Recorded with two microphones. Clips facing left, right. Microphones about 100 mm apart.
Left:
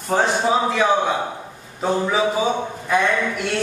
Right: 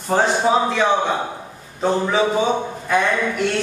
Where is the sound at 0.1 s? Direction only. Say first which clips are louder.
Right 2 dB; centre (ahead or behind).